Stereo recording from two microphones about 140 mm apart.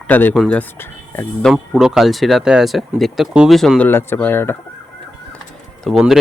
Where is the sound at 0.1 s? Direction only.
15° left (ahead or behind).